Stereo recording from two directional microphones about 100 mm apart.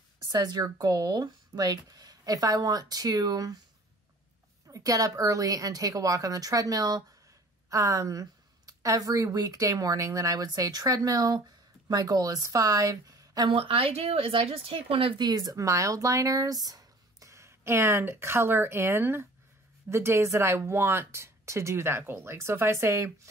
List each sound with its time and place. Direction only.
0.3 s a woman's voice: 40° right (ahead or behind)
4.6 s a woman's voice: 35° right (ahead or behind)
13.5 s speech: 65° right (ahead or behind)
15.2 s speech: 40° right (ahead or behind)